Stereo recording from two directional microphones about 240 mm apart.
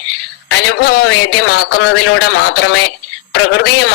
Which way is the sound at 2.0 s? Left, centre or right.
Left.